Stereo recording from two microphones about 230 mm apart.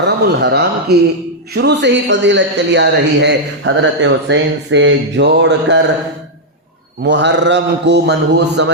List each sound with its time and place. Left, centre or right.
0.0 s a man's voice: right
7.0 s a man's voice: right